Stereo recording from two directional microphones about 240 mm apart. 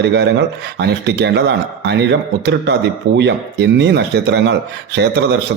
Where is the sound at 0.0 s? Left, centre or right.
Right.